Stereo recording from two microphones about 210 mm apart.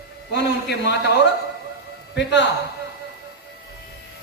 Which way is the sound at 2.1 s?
55° left (ahead or behind).